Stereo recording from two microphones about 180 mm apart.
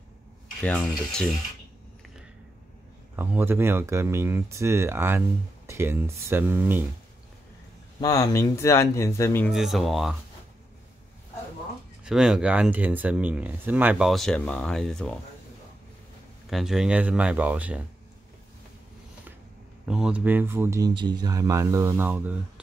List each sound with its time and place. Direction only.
0.7 s speech: 5° left (ahead or behind)
3.2 s speech: 10° right (ahead or behind)
8.0 s speech: 20° left (ahead or behind)
9.5 s speech: centre (ahead or behind)
12.0 s speech: 5° right (ahead or behind)
16.4 s speech: centre (ahead or behind)
19.9 s speech: 5° right (ahead or behind)